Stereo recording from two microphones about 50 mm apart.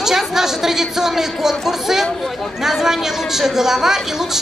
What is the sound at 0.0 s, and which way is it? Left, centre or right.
A woman's voice, centre.